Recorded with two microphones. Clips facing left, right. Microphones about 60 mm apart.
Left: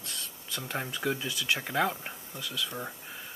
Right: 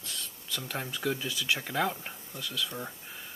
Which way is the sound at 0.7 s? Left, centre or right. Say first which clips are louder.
Left 1 dB; centre.